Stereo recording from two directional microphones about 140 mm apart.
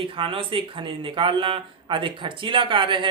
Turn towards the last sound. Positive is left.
turn(degrees=-35)  # may be behind; listen again after turning